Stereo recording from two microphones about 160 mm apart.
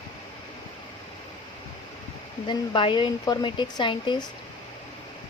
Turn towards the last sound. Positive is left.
turn(degrees=30)  # may be behind; listen again after turning